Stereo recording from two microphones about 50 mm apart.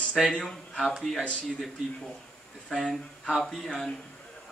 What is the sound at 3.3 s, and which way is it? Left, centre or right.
Speech, centre.